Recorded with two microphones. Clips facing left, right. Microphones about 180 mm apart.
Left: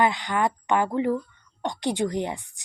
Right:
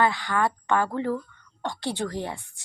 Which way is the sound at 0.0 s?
20° left (ahead or behind).